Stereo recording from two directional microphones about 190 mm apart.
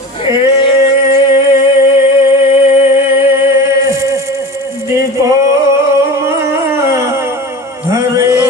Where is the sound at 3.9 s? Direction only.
15° right (ahead or behind).